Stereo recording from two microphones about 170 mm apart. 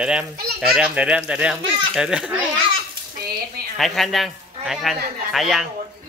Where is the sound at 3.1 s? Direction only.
65° right (ahead or behind).